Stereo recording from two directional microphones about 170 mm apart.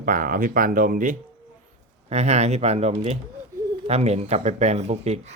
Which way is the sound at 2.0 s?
40° right (ahead or behind).